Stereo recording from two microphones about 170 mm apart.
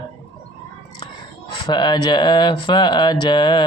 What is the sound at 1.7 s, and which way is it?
Speech, 25° left (ahead or behind).